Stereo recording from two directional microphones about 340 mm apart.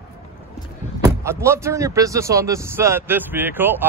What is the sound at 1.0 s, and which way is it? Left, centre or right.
Speech, centre.